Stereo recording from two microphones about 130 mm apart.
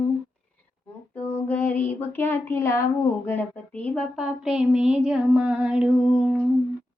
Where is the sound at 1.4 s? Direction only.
15° left (ahead or behind).